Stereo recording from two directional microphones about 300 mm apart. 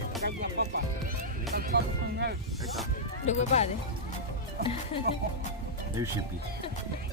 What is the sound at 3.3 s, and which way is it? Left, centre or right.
Speech, left.